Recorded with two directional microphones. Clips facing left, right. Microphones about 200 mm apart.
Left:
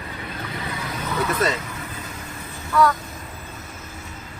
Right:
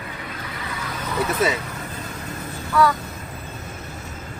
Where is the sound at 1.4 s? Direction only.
5° right (ahead or behind).